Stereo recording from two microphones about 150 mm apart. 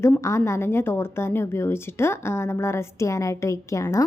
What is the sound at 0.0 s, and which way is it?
Speech, 20° left (ahead or behind).